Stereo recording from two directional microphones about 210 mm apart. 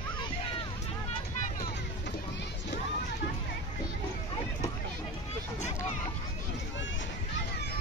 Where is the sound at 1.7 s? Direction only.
55° left (ahead or behind).